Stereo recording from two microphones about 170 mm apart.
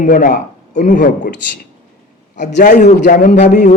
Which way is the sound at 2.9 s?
80° left.